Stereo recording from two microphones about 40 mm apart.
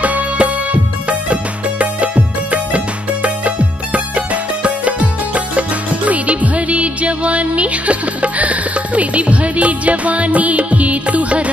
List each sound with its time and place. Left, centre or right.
0.0 s music: right